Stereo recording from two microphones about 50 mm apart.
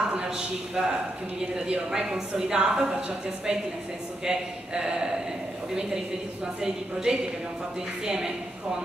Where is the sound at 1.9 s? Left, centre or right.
Centre.